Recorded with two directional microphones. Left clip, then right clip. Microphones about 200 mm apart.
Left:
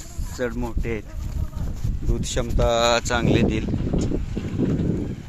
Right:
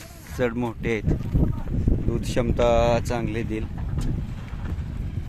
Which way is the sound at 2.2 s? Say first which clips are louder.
Right 2 dB; 10° right (ahead or behind).